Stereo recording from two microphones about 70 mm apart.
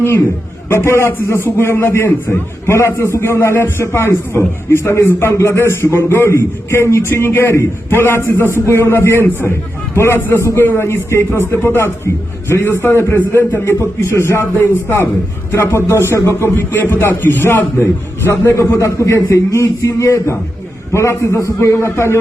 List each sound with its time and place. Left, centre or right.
0.9 s a man's voice: left
16.6 s a man's voice: left